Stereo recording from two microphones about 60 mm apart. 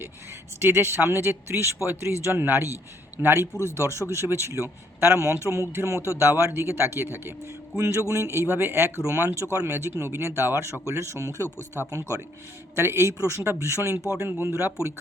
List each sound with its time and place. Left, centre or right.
0.6 s speech: right
3.7 s speech: right
7.4 s speech: right
9.7 s speech: right
11.4 s speech: left
11.9 s speech: right
12.7 s speech: right
13.1 s speech: right
14.3 s speech: right